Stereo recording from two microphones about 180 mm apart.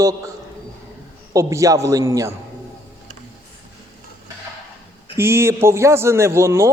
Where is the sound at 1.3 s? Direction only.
15° right (ahead or behind).